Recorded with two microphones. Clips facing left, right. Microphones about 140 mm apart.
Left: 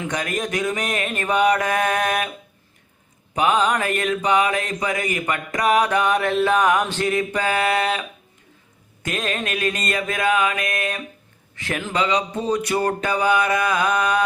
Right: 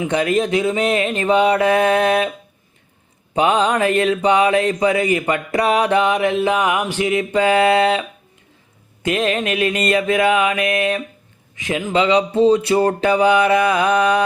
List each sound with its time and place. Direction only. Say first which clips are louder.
0.0 s mantra: right 8 dB; 25° right (ahead or behind)
3.3 s mantra: right 3 dB; 30° right (ahead or behind)
9.0 s mantra: right 7 dB; 25° right (ahead or behind)
11.5 s mantra: right 6 dB; 15° right (ahead or behind)